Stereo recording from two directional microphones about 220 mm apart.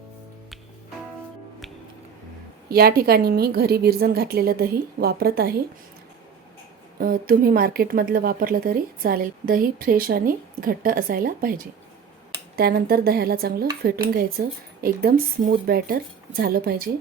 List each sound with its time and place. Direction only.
2.6 s speech: 45° right (ahead or behind)
7.0 s a woman's voice: 40° right (ahead or behind)